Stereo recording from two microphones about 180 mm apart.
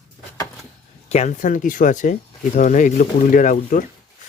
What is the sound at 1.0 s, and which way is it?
Speech, 40° left (ahead or behind).